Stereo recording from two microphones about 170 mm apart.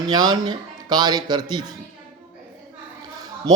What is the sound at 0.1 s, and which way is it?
Speech, 25° right (ahead or behind).